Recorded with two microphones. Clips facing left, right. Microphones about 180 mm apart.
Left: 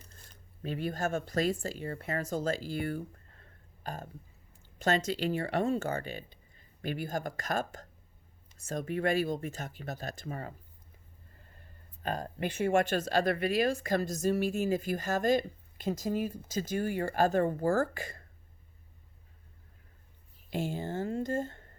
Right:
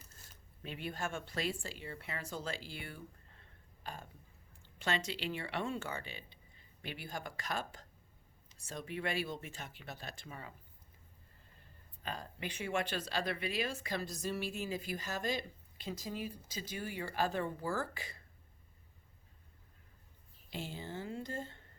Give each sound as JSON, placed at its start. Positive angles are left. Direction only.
{"t": 0.6, "sound": "speech", "side_deg": 40}
{"t": 12.0, "sound": "speech", "side_deg": 45}
{"t": 20.5, "sound": "speech", "side_deg": 50}